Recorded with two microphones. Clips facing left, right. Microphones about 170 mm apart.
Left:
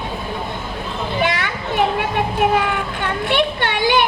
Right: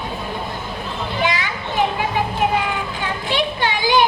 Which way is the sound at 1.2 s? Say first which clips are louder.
Even; 60° left (ahead or behind).